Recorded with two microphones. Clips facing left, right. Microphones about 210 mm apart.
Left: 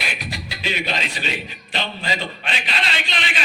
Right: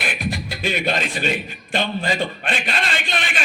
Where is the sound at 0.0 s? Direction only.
50° right (ahead or behind).